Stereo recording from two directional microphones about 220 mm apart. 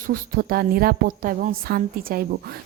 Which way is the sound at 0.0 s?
40° right (ahead or behind).